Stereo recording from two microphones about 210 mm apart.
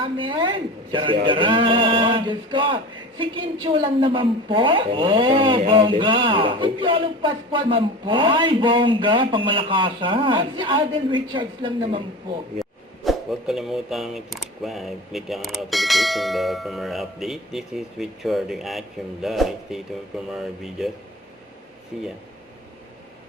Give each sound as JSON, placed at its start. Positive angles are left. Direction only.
{"t": 0.0, "sound": "a man's voice", "side_deg": -25}
{"t": 13.1, "sound": "speech", "side_deg": 0}